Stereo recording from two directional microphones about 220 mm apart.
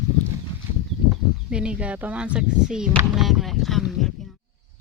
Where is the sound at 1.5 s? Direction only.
5° right (ahead or behind).